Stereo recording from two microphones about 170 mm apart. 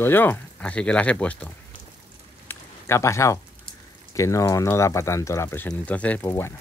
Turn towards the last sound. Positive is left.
turn(degrees=15)  # may be behind; listen again after turning